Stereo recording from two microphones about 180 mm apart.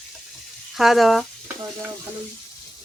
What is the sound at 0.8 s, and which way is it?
Speech, centre (ahead or behind).